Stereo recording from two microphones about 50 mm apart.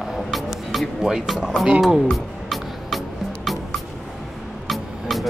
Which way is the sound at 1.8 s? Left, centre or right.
Centre.